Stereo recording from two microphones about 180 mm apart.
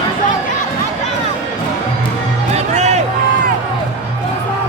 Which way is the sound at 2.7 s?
40° right (ahead or behind).